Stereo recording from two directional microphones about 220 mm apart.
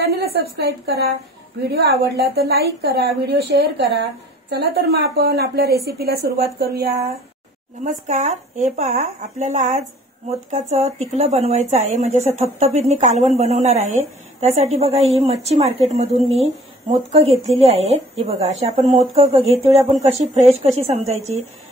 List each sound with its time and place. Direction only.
0.0 s a woman's voice: 45° right (ahead or behind)
7.8 s a woman's voice: 35° right (ahead or behind)